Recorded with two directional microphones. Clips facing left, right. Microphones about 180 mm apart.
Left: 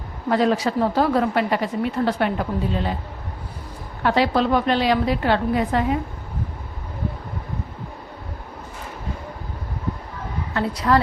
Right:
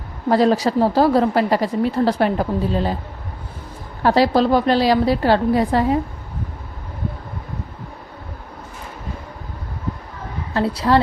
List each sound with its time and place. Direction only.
0.3 s speech: 35° right (ahead or behind)
4.0 s speech: 35° right (ahead or behind)
10.5 s speech: 30° right (ahead or behind)